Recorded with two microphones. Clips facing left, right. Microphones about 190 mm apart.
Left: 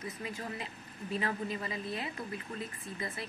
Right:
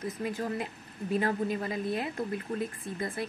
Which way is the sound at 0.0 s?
45° right (ahead or behind).